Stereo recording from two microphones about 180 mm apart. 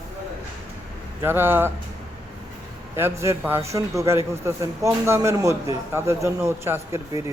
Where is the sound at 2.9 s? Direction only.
15° right (ahead or behind).